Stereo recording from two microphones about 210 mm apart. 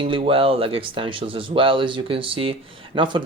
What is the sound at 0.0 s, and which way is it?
Speech, 25° right (ahead or behind).